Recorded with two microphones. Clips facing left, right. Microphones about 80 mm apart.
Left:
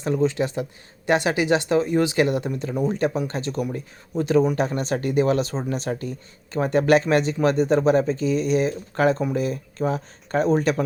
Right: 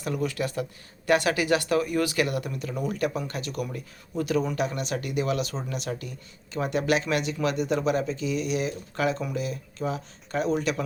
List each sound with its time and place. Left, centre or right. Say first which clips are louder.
0.0 s speech: left 7 dB; left